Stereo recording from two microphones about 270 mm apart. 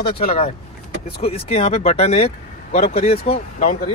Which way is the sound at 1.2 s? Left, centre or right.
Left.